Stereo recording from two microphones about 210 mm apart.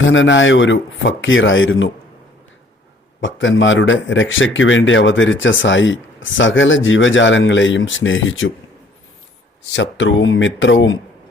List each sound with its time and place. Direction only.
0.0 s speech: 65° left (ahead or behind)
3.2 s speech: 65° left (ahead or behind)
9.7 s speech: 60° left (ahead or behind)